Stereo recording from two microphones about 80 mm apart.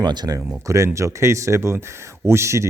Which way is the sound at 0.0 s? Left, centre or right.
Right.